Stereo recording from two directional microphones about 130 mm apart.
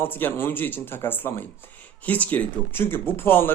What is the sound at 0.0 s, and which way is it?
Speech, 15° left (ahead or behind).